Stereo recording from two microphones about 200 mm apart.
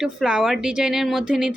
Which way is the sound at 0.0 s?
5° right (ahead or behind).